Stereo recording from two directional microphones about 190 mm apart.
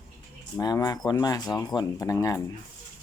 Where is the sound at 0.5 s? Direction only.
20° left (ahead or behind).